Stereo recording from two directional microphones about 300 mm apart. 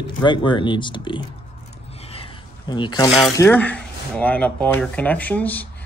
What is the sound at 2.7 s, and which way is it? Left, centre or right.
Speech, centre.